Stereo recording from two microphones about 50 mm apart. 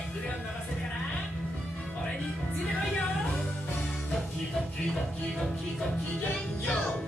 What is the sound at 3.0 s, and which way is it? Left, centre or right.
Music, centre.